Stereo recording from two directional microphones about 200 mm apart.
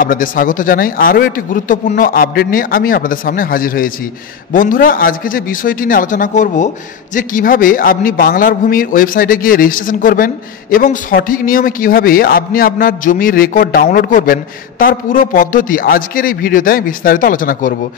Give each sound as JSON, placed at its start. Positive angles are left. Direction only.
{"t": 0.0, "sound": "a man's voice", "side_deg": 45}